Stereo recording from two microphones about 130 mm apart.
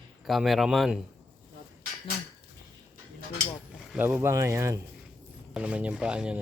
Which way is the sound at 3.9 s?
15° right (ahead or behind).